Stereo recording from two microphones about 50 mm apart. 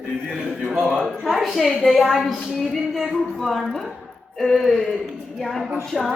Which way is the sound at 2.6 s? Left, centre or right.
Centre.